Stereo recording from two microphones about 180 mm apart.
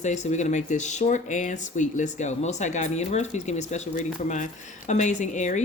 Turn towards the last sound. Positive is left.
turn(degrees=40)  # may be behind; listen again after turning